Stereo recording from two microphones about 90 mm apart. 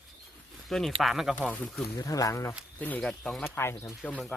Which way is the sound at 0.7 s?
5° left (ahead or behind).